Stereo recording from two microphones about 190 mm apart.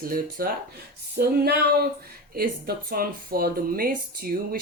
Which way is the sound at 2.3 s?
50° right (ahead or behind).